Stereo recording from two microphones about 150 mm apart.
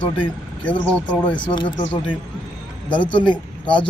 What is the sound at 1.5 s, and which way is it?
Speech, 30° left (ahead or behind).